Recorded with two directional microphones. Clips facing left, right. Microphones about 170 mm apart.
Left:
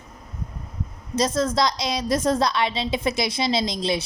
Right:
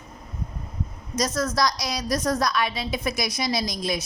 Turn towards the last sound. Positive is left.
turn(degrees=25)  # may be behind; listen again after turning